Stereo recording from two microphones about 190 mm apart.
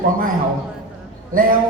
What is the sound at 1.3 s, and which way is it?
Speech, 45° right (ahead or behind).